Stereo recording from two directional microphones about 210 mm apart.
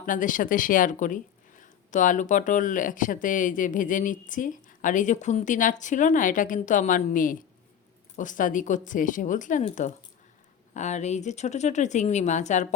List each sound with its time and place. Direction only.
0.0 s speech: 40° left (ahead or behind)